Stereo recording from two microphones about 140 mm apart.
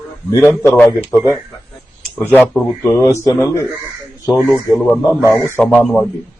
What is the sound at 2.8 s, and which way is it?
Speech, 20° left (ahead or behind).